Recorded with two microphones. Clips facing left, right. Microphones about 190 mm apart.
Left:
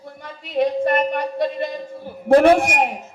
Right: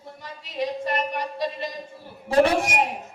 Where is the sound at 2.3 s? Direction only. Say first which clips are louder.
Left 7 dB; 55° left (ahead or behind).